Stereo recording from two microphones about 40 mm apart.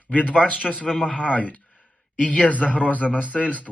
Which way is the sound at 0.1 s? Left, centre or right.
Left.